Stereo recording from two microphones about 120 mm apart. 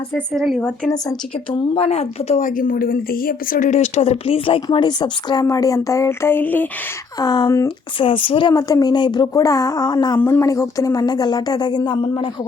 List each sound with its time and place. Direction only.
0.1 s speech: centre (ahead or behind)
1.7 s a woman's voice: 55° left (ahead or behind)
3.6 s a woman's voice: 70° left (ahead or behind); by 6.7 s 15° left (ahead or behind)
7.2 s a woman's voice: 35° left (ahead or behind)
7.9 s a woman's voice: 45° left (ahead or behind)
8.5 s a woman's voice: 30° left (ahead or behind)
10.2 s speech: 15° left (ahead or behind)
10.4 s a woman's voice: 30° left (ahead or behind)